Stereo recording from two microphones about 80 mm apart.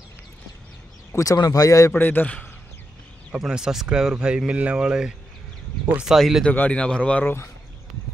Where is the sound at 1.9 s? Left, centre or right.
Left.